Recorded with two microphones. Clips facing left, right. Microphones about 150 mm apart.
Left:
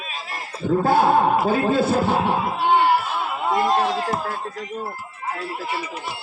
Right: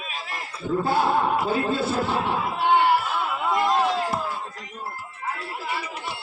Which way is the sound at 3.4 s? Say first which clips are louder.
Left 2 dB; 25° left (ahead or behind).